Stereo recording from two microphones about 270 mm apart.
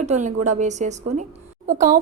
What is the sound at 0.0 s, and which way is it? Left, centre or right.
A woman's voice, right.